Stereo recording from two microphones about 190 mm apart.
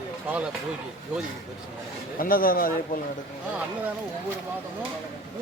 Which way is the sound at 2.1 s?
50° left (ahead or behind).